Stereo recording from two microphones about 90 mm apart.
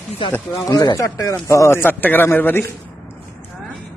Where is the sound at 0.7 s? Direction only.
45° left (ahead or behind); by 2.7 s 25° left (ahead or behind).